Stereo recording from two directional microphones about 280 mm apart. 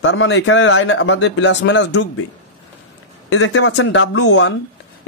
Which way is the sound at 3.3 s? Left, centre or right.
Left.